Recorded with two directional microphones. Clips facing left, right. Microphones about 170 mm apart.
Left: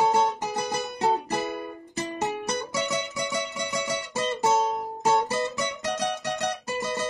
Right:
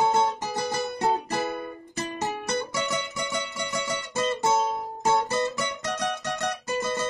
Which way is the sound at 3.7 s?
20° left (ahead or behind).